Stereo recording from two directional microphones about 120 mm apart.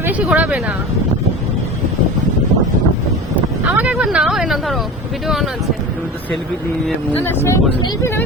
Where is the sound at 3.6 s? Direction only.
15° right (ahead or behind).